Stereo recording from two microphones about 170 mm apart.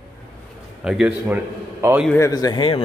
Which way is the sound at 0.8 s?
5° right (ahead or behind).